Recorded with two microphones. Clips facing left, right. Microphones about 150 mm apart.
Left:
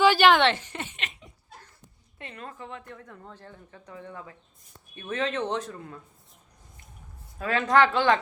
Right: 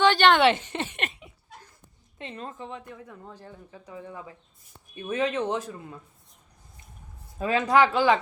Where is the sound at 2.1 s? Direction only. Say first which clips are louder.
Right 3 dB; 25° right (ahead or behind).